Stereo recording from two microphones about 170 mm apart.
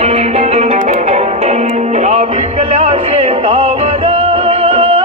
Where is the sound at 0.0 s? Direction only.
35° right (ahead or behind).